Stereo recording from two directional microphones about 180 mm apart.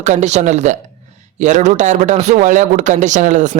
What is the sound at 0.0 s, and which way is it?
A man's voice, 40° right (ahead or behind).